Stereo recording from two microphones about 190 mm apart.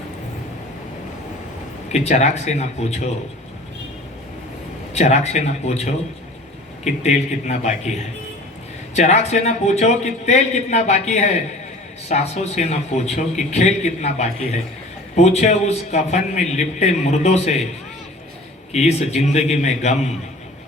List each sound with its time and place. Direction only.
1.9 s a man's voice: 35° left (ahead or behind)
4.9 s a man's voice: 35° left (ahead or behind)
9.0 s a man's voice: 35° left (ahead or behind)
18.7 s a man's voice: 35° left (ahead or behind)